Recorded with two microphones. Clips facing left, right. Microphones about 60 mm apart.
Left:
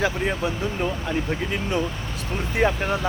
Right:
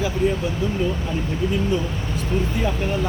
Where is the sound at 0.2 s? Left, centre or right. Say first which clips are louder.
Right 5 dB; left.